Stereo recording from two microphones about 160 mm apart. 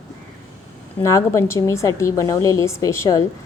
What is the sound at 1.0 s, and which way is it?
A woman's voice, 20° left (ahead or behind).